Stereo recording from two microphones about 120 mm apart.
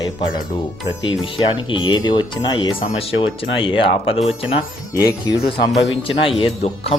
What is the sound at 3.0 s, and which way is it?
Speech, 50° left (ahead or behind).